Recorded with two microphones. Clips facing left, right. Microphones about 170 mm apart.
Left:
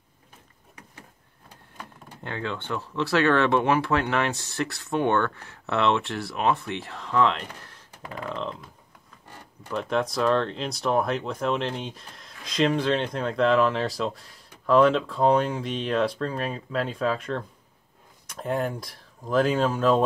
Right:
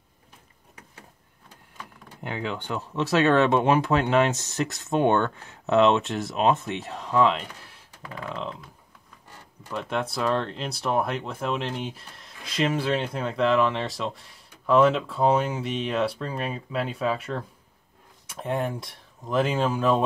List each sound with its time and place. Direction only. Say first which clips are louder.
2.2 s speech: right 1 dB; 10° right (ahead or behind)
9.7 s speech: left 3 dB; 5° right (ahead or behind)
18.4 s speech: left 1 dB; centre (ahead or behind)